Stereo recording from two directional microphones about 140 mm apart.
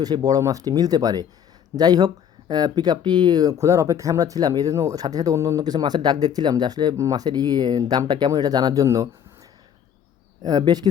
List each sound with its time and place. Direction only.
0.0 s speech: 25° right (ahead or behind)
10.4 s speech: 30° right (ahead or behind)